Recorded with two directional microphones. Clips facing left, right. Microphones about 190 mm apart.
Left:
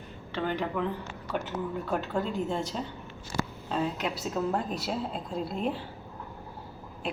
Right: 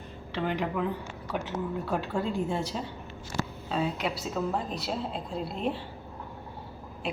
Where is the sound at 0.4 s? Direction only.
5° right (ahead or behind).